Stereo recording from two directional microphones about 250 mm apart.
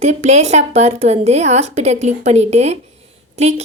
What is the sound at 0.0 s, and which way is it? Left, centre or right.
A woman's voice, right.